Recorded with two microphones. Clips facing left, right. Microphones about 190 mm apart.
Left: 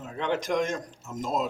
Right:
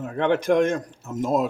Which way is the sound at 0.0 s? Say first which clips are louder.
Right 7 dB; 60° right (ahead or behind).